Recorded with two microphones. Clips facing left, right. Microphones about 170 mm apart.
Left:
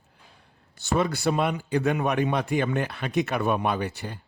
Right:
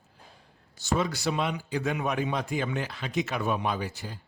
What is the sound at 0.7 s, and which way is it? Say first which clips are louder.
A man's voice: left 3 dB; 60° left (ahead or behind).